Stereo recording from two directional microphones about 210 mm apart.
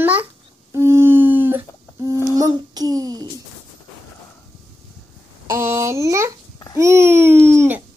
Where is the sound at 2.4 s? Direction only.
20° right (ahead or behind).